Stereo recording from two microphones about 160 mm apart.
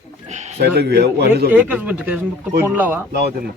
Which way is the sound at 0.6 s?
85° right.